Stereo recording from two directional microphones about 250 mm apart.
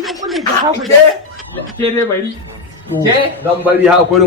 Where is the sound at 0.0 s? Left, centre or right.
Centre.